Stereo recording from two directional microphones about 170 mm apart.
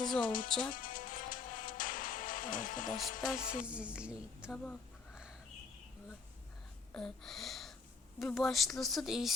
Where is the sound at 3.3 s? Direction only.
5° right (ahead or behind).